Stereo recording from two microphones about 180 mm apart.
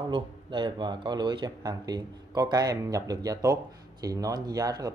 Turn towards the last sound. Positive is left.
turn(degrees=-20)  # may be behind; listen again after turning